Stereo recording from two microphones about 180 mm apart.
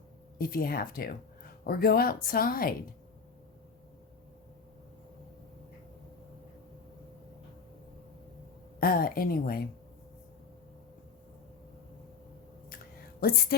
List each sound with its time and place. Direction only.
0.3 s a woman's voice: 55° left (ahead or behind)
8.8 s a woman's voice: 55° left (ahead or behind)
13.1 s a woman's voice: 60° left (ahead or behind)